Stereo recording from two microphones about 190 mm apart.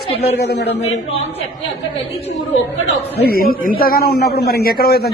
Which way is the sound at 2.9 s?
55° left (ahead or behind).